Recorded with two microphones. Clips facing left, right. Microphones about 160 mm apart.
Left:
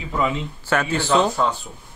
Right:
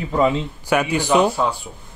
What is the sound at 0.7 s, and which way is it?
Speech, 15° right (ahead or behind).